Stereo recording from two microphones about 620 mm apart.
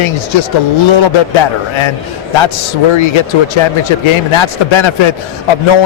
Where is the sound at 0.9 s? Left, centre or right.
Left.